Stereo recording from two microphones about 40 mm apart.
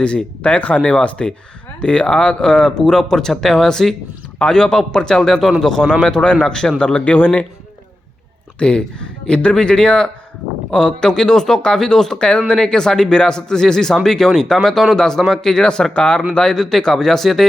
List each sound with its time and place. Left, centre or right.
0.0 s a man's voice: left
5.4 s a man's voice: centre
5.6 s speech: centre; by 7.4 s left
8.5 s speech: left
16.6 s speech: centre